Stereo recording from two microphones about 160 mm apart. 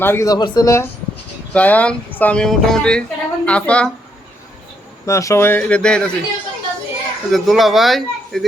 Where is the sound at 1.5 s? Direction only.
10° left (ahead or behind).